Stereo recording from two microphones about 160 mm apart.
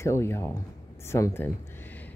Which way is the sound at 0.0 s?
15° left (ahead or behind).